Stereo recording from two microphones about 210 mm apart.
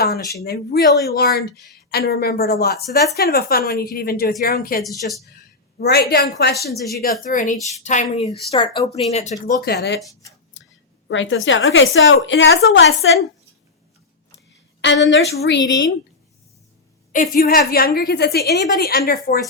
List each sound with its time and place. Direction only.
0.0 s a woman's voice: 50° left (ahead or behind)
9.6 s a woman's voice: 50° left (ahead or behind)
11.1 s a woman's voice: 65° left (ahead or behind)
14.3 s a sound: 55° left (ahead or behind)
15.1 s a woman's voice: 55° left (ahead or behind)
17.1 s a woman's voice: 40° left (ahead or behind)